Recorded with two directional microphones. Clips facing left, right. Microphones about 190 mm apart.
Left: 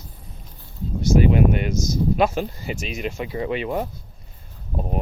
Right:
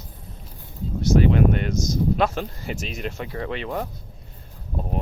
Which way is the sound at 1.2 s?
15° left (ahead or behind).